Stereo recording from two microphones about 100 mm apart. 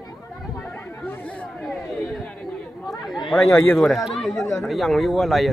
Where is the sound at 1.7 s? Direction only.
5° left (ahead or behind).